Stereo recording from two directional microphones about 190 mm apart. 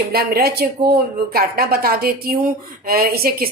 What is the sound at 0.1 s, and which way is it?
A woman's voice, 55° right (ahead or behind).